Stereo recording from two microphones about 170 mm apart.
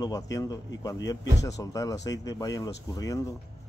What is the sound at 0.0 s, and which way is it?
Speech, 20° left (ahead or behind).